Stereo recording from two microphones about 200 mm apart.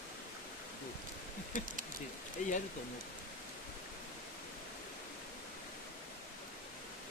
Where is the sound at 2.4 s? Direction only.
40° left (ahead or behind).